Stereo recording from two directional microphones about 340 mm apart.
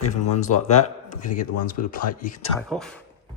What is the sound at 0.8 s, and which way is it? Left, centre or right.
Speech, left.